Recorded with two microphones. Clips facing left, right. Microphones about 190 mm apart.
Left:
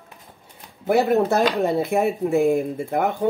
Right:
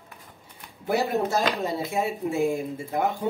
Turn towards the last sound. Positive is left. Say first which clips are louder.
# left 5 dB
turn(degrees=55)  # may be behind; listen again after turning